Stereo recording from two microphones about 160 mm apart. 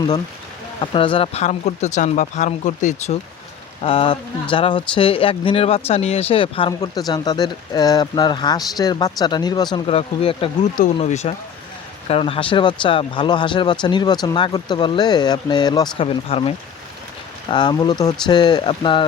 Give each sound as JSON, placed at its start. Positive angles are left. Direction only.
{"t": 0.8, "sound": "speech", "side_deg": 35}
{"t": 3.8, "sound": "speech", "side_deg": 35}
{"t": 9.7, "sound": "speech", "side_deg": 40}